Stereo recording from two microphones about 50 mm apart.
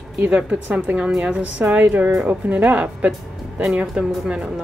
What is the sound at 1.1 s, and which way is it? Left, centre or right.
Speech, centre.